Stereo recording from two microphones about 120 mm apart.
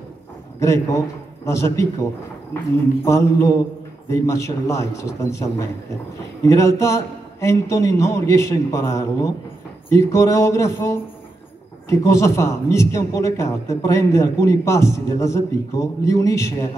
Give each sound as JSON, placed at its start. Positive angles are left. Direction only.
{"t": 0.6, "sound": "a man's voice", "side_deg": 25}
{"t": 3.1, "sound": "a man's voice", "side_deg": 25}